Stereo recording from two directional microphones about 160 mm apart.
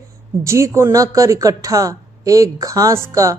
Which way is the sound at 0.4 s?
20° right (ahead or behind).